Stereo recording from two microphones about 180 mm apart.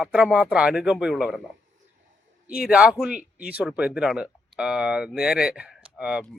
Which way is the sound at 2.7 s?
5° right (ahead or behind).